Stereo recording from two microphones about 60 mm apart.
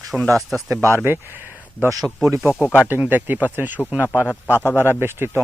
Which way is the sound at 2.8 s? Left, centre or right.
Right.